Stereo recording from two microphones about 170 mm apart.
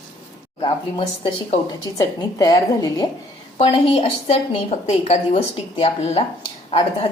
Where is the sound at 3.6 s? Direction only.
35° left (ahead or behind).